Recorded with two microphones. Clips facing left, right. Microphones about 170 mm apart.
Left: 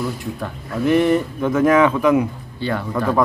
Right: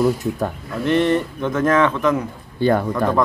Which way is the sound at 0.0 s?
45° right (ahead or behind).